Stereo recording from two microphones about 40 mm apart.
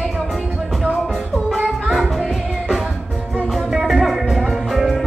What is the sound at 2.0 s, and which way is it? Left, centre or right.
Music, centre.